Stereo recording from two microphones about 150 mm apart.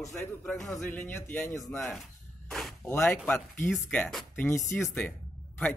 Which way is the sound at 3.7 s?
5° left (ahead or behind).